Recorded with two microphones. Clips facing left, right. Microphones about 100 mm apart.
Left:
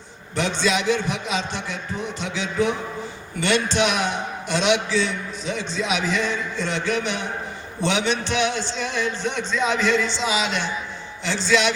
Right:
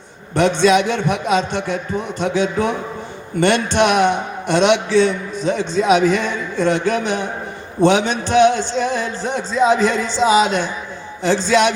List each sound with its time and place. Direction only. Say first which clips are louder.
0.3 s a man's voice: right 9 dB; 50° right (ahead or behind)